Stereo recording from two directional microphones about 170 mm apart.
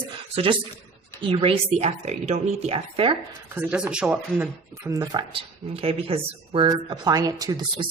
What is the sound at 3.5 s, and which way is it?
A woman's voice, 5° right (ahead or behind).